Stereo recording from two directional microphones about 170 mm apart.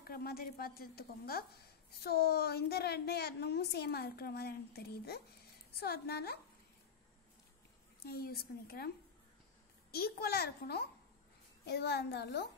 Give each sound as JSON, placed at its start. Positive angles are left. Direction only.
{"t": 0.0, "sound": "a woman's voice", "side_deg": 65}
{"t": 8.0, "sound": "a woman's voice", "side_deg": 65}